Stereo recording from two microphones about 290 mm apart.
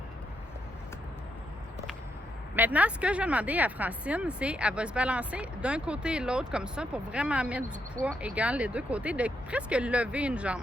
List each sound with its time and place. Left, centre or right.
2.6 s speech: centre